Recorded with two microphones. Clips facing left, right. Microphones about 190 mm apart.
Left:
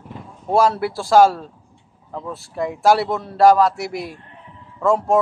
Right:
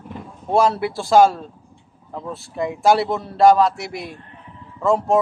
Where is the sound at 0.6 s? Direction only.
20° right (ahead or behind).